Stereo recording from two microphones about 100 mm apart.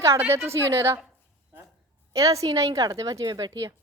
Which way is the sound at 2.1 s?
35° right (ahead or behind).